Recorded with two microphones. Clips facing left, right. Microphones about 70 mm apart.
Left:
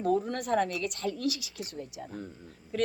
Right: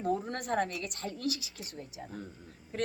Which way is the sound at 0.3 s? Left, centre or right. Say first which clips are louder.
Left 4 dB; right.